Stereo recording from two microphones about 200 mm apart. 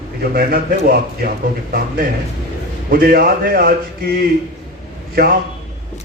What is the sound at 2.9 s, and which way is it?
Speech, 50° right (ahead or behind).